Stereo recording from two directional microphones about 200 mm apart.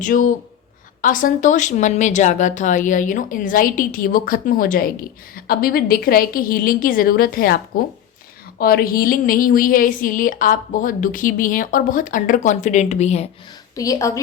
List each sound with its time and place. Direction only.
0.0 s speech: 40° left (ahead or behind)
13.7 s a woman's voice: 15° left (ahead or behind)